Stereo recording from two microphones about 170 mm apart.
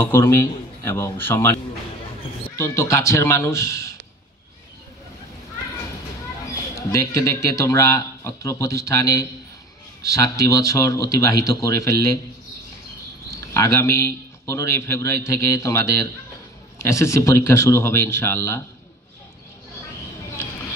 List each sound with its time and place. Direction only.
0.0 s a man's voice: 15° left (ahead or behind)
6.9 s a man's voice: 20° left (ahead or behind)
13.5 s a man's voice: 15° left (ahead or behind)